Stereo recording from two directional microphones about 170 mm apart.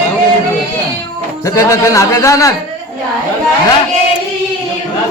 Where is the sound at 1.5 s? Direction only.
20° left (ahead or behind).